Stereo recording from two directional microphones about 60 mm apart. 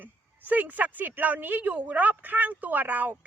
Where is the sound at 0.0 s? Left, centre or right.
Right.